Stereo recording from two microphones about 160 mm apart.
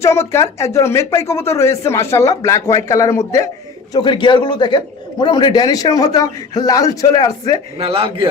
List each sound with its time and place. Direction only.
0.0 s speech: 15° left (ahead or behind)
3.9 s a man's voice: 30° left (ahead or behind)
7.8 s a man's voice: 35° right (ahead or behind)